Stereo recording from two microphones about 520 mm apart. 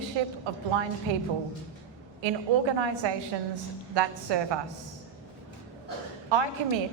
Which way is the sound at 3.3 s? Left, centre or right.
Right.